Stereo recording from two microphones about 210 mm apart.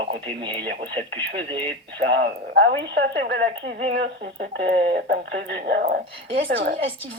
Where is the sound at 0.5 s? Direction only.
55° right (ahead or behind).